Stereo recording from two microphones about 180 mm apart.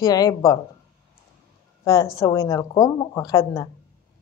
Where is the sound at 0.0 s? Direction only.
20° left (ahead or behind).